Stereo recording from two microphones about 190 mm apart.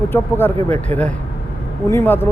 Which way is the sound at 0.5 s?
35° right (ahead or behind).